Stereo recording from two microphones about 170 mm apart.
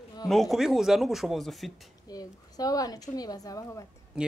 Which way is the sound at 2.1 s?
20° left (ahead or behind).